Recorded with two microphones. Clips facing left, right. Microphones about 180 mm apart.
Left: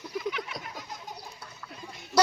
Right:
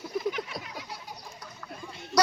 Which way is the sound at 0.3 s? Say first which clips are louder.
Right 2 dB; 45° right (ahead or behind).